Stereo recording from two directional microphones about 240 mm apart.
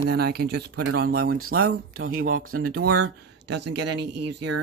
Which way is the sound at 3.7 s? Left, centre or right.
Right.